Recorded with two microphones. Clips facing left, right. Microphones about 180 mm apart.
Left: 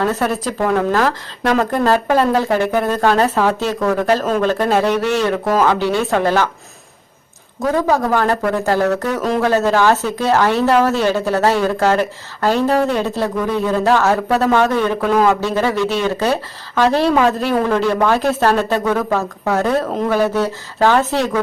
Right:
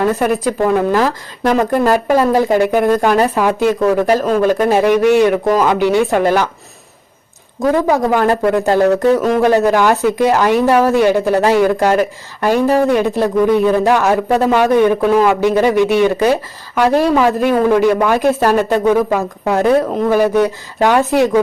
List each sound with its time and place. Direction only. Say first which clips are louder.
0.0 s speech: right 4 dB; 15° right (ahead or behind)
7.9 s speech: right 3 dB; 15° right (ahead or behind)